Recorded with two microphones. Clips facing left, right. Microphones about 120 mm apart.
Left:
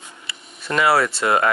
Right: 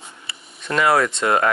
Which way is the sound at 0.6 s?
5° left (ahead or behind).